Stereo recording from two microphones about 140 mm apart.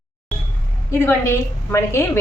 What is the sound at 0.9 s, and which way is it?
A woman's voice, 15° left (ahead or behind).